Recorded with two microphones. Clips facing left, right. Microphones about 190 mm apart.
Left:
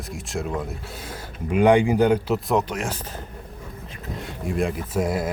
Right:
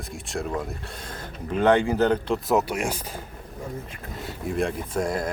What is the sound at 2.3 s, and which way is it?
Speech, 5° right (ahead or behind).